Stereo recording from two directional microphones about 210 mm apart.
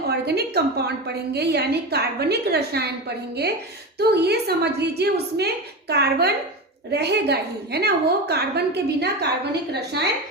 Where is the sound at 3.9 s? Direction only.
50° right (ahead or behind).